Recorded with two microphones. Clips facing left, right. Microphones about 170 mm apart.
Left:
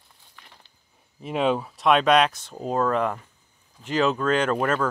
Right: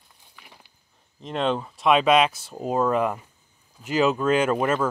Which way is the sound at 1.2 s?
10° left (ahead or behind).